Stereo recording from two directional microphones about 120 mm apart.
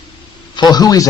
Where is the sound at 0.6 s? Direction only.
35° left (ahead or behind).